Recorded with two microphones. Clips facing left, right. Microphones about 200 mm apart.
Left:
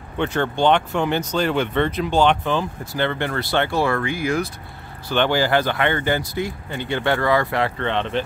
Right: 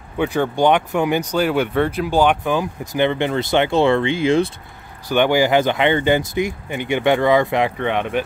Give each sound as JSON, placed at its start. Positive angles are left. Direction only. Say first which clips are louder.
{"t": 0.2, "sound": "speech", "louder": "right 3 dB", "side_deg": -10}
{"t": 5.1, "sound": "speech", "louder": "right 4 dB", "side_deg": -15}